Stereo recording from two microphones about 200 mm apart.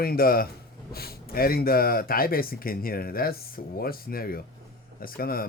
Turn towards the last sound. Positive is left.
turn(degrees=50)  # may be behind; listen again after turning